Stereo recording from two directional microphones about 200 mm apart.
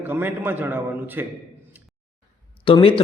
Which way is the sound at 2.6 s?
25° left (ahead or behind).